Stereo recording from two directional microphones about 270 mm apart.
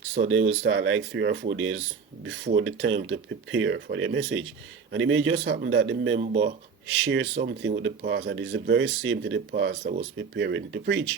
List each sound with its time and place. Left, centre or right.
0.2 s speech: right
0.5 s speech: right
6.1 s speech: right
7.0 s speech: right